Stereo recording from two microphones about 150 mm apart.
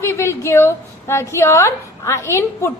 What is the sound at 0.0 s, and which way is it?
A woman's voice, 15° left (ahead or behind).